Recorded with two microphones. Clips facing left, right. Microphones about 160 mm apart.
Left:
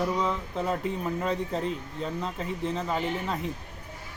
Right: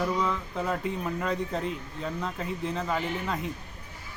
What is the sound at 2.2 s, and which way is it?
Speech, centre (ahead or behind).